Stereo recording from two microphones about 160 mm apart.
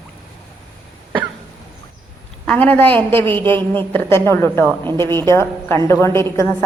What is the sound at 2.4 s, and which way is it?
A man's voice, 10° left (ahead or behind).